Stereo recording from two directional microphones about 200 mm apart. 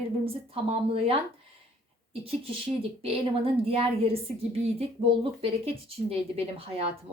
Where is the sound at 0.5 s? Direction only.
30° right (ahead or behind).